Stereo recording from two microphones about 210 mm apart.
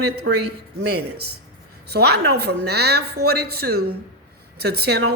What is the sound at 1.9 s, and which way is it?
A woman's voice, 50° right (ahead or behind).